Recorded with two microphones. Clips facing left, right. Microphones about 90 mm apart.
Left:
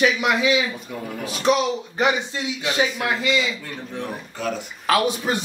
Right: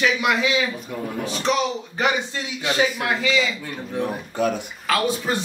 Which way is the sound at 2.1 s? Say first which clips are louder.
Even; 20° left (ahead or behind).